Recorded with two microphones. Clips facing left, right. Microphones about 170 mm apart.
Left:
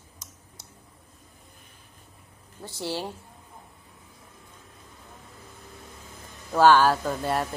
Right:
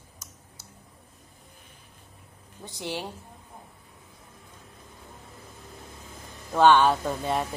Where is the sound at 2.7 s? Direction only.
15° right (ahead or behind).